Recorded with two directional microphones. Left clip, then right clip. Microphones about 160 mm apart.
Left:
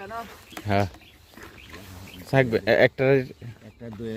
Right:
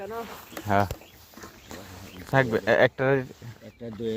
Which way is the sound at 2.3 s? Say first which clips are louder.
Left 1 dB; 40° left (ahead or behind).